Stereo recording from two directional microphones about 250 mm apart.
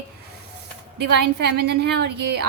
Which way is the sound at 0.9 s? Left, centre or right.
Right.